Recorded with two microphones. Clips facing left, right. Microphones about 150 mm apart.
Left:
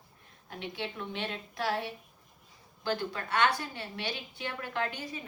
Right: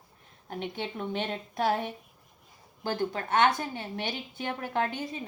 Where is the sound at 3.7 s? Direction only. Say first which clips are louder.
Right 3 dB; 50° right (ahead or behind).